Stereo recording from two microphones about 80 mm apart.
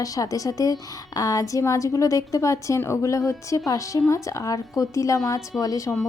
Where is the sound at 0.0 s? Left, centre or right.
Left.